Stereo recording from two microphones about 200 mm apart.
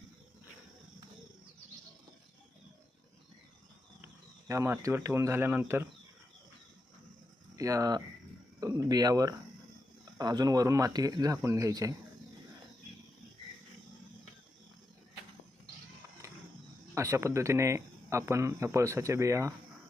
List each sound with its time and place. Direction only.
4.0 s speech: 15° right (ahead or behind)
7.5 s speech: 15° right (ahead or behind)
16.2 s a sound: 15° right (ahead or behind)
16.9 s speech: 15° right (ahead or behind)